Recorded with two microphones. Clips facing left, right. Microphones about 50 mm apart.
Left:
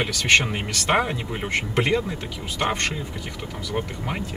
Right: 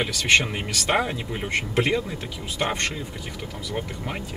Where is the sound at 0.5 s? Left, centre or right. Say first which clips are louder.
Left 2 dB; centre.